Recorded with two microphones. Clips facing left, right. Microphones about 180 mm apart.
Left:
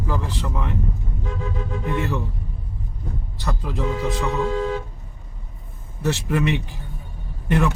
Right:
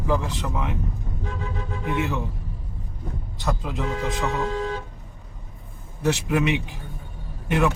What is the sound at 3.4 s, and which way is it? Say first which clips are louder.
Speech: right 1 dB; 20° right (ahead or behind).